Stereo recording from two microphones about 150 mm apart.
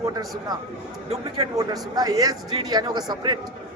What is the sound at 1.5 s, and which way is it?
A man's voice, 25° right (ahead or behind).